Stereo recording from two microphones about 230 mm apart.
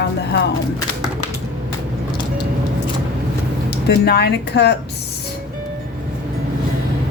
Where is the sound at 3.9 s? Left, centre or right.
Left.